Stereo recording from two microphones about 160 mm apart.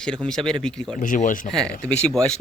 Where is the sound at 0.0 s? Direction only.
5° left (ahead or behind).